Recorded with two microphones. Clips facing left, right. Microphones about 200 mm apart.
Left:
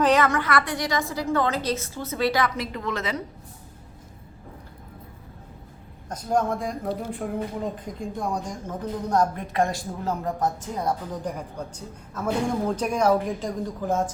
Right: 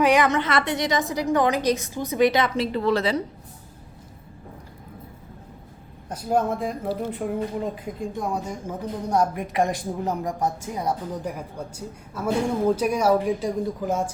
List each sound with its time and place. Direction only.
0.0 s a woman's voice: 15° right (ahead or behind); by 3.2 s 30° right (ahead or behind)
6.1 s a woman's voice: 5° right (ahead or behind)